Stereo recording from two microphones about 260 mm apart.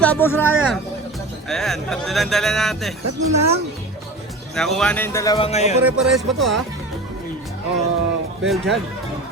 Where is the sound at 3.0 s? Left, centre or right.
Right.